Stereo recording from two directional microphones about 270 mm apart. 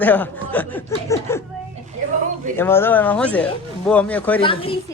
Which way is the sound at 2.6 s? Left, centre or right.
Centre.